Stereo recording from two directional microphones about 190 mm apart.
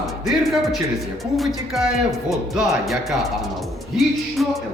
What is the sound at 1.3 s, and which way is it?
Speech, centre (ahead or behind).